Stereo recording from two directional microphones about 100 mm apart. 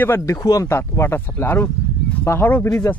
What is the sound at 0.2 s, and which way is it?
Speech, 35° left (ahead or behind).